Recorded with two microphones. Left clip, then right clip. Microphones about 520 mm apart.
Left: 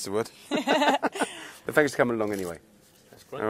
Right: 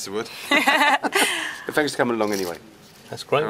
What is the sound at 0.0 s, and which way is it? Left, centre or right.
Speech, left.